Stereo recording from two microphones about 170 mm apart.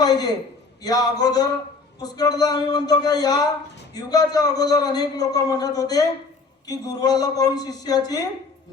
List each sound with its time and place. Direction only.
0.0 s a man's voice: 25° left (ahead or behind)